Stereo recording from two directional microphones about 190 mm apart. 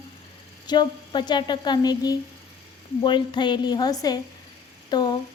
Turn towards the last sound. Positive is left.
turn(degrees=20)  # may be behind; listen again after turning